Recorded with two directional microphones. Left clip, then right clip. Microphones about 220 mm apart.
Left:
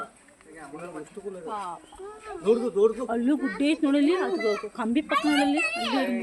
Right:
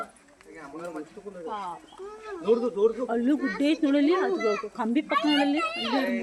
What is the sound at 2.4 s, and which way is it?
Speech, 45° left (ahead or behind).